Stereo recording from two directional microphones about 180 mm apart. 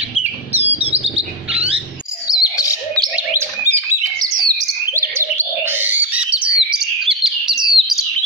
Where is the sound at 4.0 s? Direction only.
20° right (ahead or behind).